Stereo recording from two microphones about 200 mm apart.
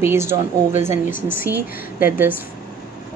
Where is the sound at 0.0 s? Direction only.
15° right (ahead or behind).